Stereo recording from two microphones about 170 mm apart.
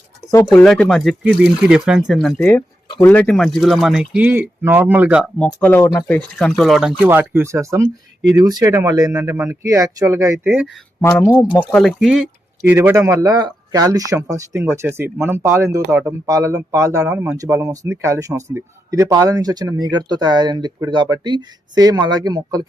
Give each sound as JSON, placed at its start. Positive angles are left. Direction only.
{"t": 0.5, "sound": "speech", "side_deg": 5}
{"t": 5.5, "sound": "speech", "side_deg": 10}
{"t": 7.0, "sound": "speech", "side_deg": -10}
{"t": 9.1, "sound": "speech", "side_deg": -10}
{"t": 11.2, "sound": "speech", "side_deg": 15}
{"t": 11.7, "sound": "speech", "side_deg": 0}
{"t": 12.6, "sound": "speech", "side_deg": -10}